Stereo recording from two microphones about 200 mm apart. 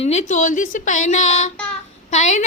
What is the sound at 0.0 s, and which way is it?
A woman's voice, 35° left (ahead or behind).